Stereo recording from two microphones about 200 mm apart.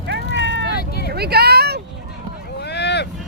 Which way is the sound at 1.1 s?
55° right (ahead or behind).